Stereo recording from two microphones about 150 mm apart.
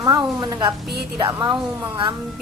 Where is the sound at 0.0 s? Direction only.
25° right (ahead or behind).